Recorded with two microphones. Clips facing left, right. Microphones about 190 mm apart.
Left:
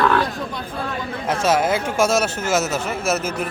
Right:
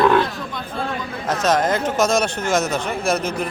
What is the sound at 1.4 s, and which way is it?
Speech, 10° left (ahead or behind).